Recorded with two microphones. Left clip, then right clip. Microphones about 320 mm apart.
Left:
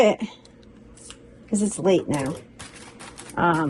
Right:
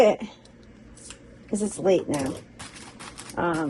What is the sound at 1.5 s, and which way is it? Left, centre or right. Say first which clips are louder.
Speech: left 1 dB; left.